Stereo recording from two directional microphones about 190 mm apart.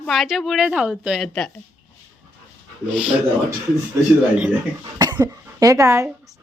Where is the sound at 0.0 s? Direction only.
Centre (ahead or behind).